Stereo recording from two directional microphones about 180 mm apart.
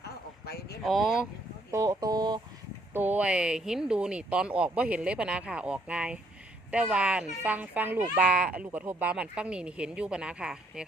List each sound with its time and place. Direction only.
0.9 s speech: centre (ahead or behind)
1.7 s speech: 20° right (ahead or behind)
2.9 s speech: 10° right (ahead or behind)